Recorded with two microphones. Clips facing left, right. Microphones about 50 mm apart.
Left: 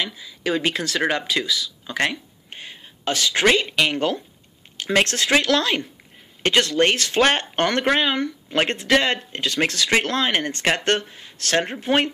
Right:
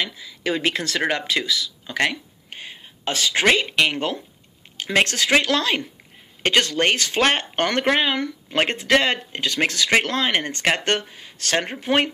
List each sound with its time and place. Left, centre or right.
0.0 s speech: right
2.0 s a sound: right
3.9 s speech: right